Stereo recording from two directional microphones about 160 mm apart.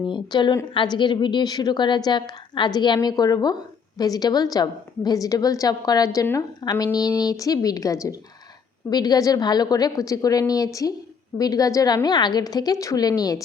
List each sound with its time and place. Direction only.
0.1 s a woman's voice: 30° left (ahead or behind)